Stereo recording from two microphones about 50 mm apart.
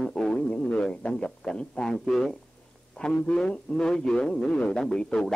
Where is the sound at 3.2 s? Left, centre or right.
Centre.